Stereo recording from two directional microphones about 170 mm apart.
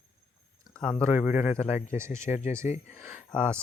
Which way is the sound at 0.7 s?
5° left (ahead or behind).